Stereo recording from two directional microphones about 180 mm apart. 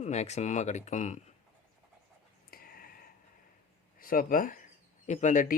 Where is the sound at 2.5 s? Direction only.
55° left (ahead or behind).